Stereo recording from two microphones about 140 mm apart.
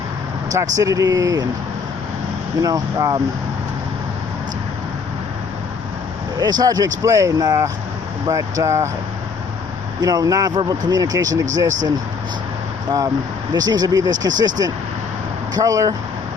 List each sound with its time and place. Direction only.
0.5 s speech: 25° right (ahead or behind)
2.6 s speech: 25° right (ahead or behind)
6.3 s speech: 30° right (ahead or behind)
10.0 s speech: 25° right (ahead or behind)
13.5 s speech: 30° right (ahead or behind)